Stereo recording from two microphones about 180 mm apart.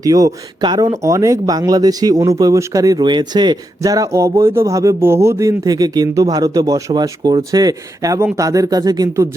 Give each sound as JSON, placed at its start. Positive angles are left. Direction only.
{"t": 0.0, "sound": "speech", "side_deg": -20}